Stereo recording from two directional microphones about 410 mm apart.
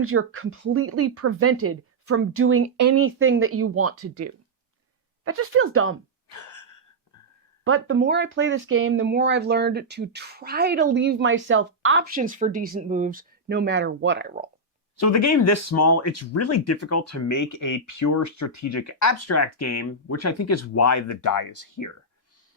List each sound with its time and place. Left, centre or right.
0.0 s speech: right
2.8 s speech: right
3.1 s speech: right
6.2 s a sound: left
7.6 s speech: right
14.9 s speech: left